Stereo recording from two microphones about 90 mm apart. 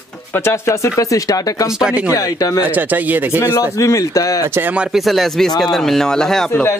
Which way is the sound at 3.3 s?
30° left (ahead or behind).